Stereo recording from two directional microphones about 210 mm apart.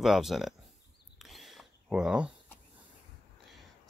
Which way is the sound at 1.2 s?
Centre (ahead or behind).